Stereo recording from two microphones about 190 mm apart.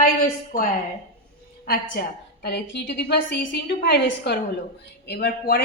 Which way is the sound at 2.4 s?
60° left (ahead or behind).